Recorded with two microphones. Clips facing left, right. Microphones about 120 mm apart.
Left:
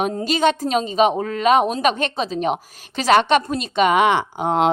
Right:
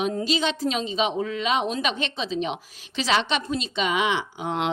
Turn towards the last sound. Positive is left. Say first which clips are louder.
# left 8 dB
turn(degrees=50)  # may be behind; listen again after turning